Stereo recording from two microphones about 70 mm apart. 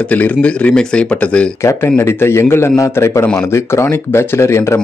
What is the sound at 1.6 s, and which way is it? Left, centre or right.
Speech, left.